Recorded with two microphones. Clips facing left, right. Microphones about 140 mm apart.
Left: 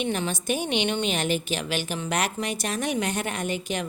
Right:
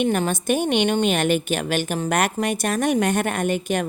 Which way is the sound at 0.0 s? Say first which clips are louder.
Right 6 dB; 50° right (ahead or behind).